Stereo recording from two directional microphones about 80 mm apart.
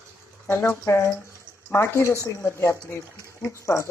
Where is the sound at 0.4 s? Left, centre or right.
Left.